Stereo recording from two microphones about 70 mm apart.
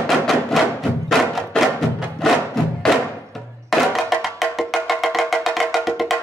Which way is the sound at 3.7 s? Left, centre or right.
Centre.